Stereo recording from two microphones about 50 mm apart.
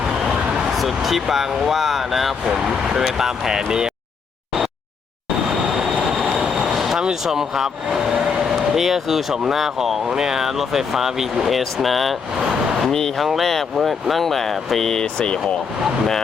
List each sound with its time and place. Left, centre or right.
0.8 s speech: centre
5.5 s train: centre
7.0 s speech: centre
12.9 s speech: centre